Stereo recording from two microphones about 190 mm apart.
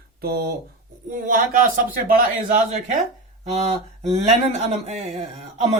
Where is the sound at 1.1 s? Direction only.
45° right (ahead or behind).